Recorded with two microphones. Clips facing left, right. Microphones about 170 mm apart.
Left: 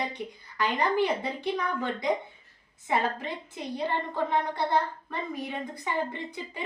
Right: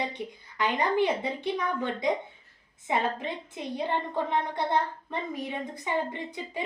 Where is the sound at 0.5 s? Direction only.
15° right (ahead or behind).